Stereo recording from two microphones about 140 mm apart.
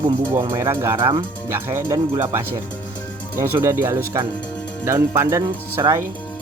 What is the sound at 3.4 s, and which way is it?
Speech, 15° right (ahead or behind).